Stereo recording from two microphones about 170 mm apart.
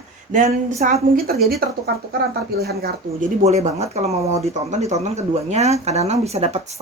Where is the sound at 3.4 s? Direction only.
40° right (ahead or behind).